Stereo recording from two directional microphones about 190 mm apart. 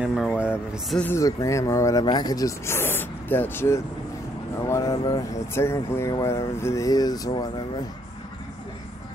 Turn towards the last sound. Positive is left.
turn(degrees=20)  # may be behind; listen again after turning